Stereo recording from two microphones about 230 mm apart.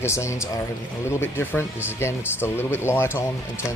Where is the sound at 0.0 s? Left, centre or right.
Centre.